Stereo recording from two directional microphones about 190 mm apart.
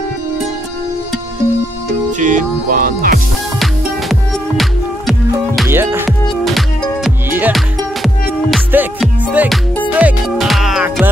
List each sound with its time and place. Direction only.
2.1 s music: 45° right (ahead or behind)
3.5 s music: centre (ahead or behind)
5.7 s music: 10° right (ahead or behind)
6.4 s music: centre (ahead or behind)
7.2 s music: 10° right (ahead or behind)
7.5 s music: centre (ahead or behind)